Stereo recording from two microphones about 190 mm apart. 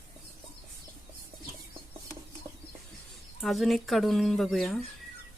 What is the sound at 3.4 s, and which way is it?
Speech, centre (ahead or behind).